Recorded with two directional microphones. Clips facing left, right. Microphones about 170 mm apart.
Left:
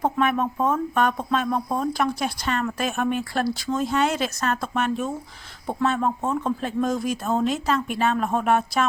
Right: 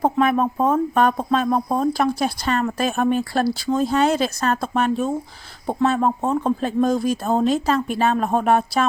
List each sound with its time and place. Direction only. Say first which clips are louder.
0.0 s speech: right 4 dB; 35° right (ahead or behind)